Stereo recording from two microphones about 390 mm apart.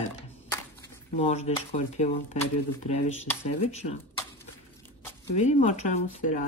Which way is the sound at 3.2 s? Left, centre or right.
Centre.